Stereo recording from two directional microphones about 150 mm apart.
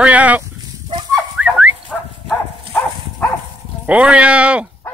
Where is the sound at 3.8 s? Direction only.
10° right (ahead or behind).